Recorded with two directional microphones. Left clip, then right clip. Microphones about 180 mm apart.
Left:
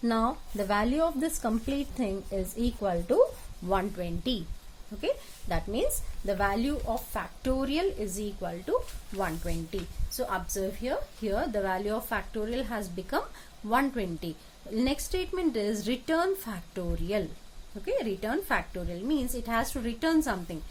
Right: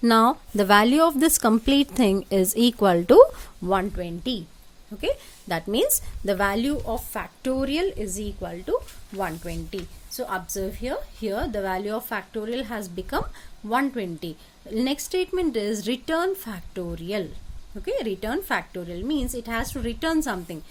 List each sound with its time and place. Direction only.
0.0 s speech: 50° right (ahead or behind)
3.7 s a woman's voice: 30° right (ahead or behind)
4.9 s a woman's voice: 35° right (ahead or behind)